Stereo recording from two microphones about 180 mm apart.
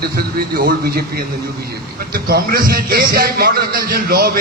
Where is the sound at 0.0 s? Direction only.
55° right (ahead or behind).